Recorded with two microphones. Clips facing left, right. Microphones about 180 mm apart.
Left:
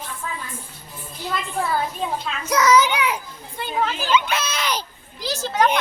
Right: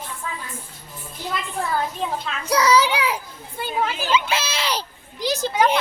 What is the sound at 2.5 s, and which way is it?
Speech, 30° right (ahead or behind).